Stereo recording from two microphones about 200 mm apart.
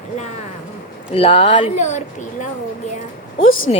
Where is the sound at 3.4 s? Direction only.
85° left.